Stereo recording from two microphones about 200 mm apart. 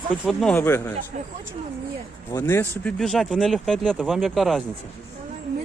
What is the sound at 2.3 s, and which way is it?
Speech, 10° left (ahead or behind).